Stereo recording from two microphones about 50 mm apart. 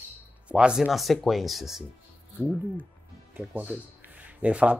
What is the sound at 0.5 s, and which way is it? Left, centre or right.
Speech, right.